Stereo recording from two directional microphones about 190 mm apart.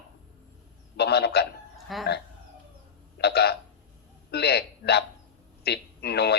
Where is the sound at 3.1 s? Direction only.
60° left (ahead or behind).